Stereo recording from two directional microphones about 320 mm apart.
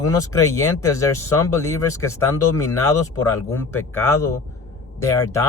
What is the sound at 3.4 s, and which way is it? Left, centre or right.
Speech, centre.